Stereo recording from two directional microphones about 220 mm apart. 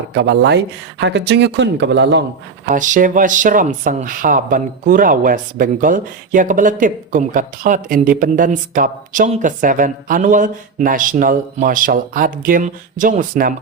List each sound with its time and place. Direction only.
0.2 s speech: 50° right (ahead or behind)
2.6 s speech: 35° right (ahead or behind)